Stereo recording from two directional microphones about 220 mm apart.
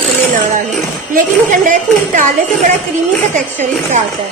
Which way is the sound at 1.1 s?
35° right (ahead or behind).